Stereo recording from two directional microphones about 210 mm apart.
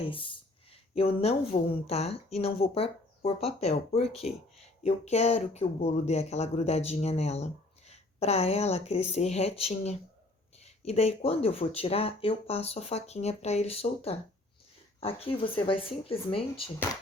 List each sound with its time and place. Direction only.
0.1 s speech: 25° left (ahead or behind)